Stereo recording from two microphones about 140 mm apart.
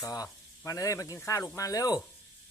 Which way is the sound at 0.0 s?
25° left (ahead or behind).